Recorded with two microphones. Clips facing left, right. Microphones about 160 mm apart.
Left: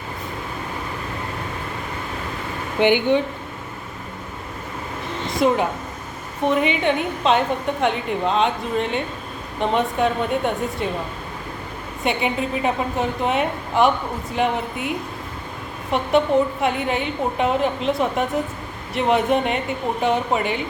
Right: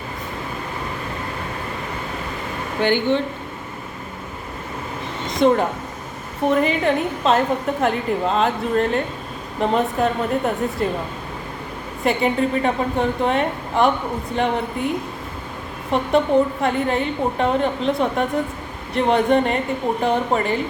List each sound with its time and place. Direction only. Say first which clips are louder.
2.8 s speech: left 2 dB; 15° left (ahead or behind)
5.4 s a woman's voice: right 3 dB; 5° left (ahead or behind)
12.0 s a woman's voice: right 3 dB; centre (ahead or behind)